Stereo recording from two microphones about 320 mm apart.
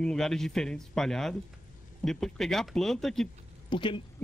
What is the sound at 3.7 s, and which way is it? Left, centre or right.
Speech, centre.